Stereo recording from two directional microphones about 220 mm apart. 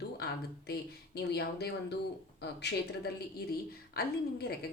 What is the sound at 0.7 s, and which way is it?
Speech, 50° left (ahead or behind).